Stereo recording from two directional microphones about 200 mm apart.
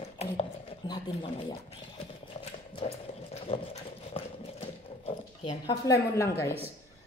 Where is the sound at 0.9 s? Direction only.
20° left (ahead or behind).